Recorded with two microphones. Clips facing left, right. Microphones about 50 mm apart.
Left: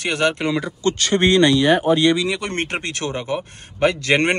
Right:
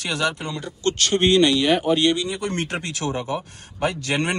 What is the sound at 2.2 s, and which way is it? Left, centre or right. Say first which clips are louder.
Speech: left 3 dB; left.